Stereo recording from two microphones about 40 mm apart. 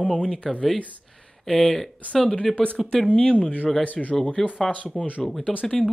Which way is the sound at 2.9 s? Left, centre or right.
Left.